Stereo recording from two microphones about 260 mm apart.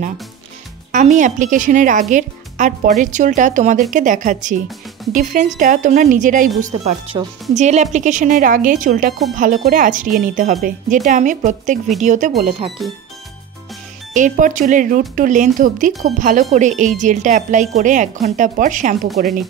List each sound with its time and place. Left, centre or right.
0.9 s speech: right
12.8 s speech: centre
14.1 s speech: right